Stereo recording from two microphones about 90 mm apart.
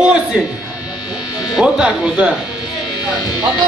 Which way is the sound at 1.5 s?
10° right (ahead or behind).